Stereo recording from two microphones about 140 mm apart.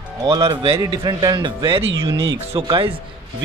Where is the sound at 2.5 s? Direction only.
40° right (ahead or behind).